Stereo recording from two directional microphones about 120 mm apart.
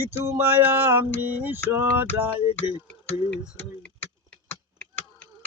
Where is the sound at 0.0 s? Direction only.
20° right (ahead or behind).